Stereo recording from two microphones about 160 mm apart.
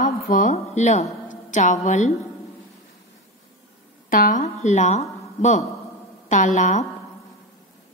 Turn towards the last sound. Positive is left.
turn(degrees=50)  # may be behind; listen again after turning